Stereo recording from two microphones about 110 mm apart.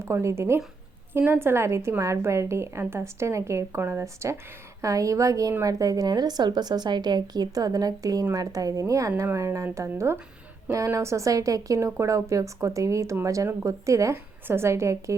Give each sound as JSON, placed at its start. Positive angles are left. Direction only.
{"t": 0.0, "sound": "a woman's voice", "side_deg": -25}